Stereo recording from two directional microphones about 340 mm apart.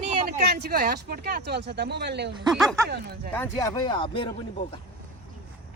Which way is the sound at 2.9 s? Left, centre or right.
Right.